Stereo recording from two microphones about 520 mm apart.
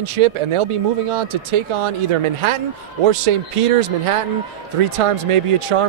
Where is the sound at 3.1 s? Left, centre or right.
Right.